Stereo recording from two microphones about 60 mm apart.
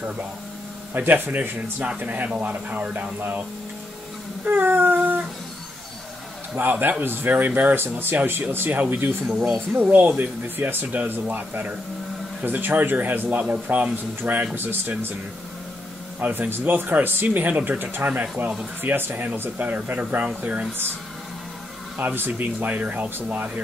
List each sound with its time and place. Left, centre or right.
0.9 s a man's voice: right
4.5 s a sound: right
6.5 s a man's voice: right
16.2 s a man's voice: right
21.9 s speech: right